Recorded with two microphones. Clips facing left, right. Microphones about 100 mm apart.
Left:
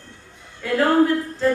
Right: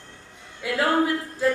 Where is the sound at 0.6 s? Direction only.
10° right (ahead or behind).